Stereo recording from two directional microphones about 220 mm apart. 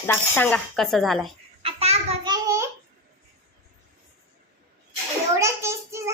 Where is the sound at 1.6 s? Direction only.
30° right (ahead or behind).